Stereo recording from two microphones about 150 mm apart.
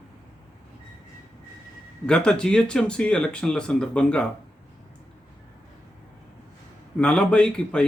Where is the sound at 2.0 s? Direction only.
5° left (ahead or behind).